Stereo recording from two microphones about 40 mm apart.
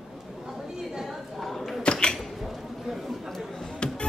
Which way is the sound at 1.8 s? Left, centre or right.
Left.